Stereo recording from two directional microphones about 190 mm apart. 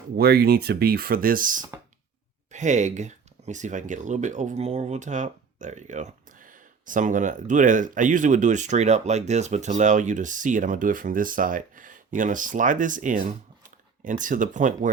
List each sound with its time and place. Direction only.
0.2 s speech: 55° right (ahead or behind)